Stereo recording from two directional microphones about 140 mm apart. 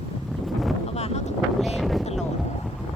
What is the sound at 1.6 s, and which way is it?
Speech, centre (ahead or behind).